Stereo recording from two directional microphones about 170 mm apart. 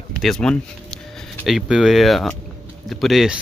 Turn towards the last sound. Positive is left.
turn(degrees=0)  # may be behind; listen again after turning